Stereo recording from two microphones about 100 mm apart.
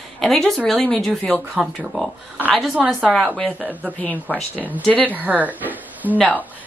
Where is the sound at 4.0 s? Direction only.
15° left (ahead or behind).